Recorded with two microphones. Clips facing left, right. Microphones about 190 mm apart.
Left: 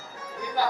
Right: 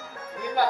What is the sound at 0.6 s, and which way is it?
Speech, 55° right (ahead or behind).